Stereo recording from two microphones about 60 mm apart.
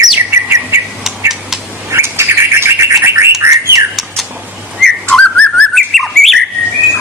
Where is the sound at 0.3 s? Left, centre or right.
Right.